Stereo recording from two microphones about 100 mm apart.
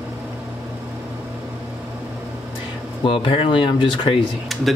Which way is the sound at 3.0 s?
60° left (ahead or behind).